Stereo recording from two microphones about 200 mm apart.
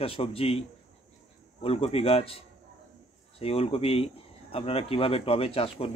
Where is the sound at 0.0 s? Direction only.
30° left (ahead or behind).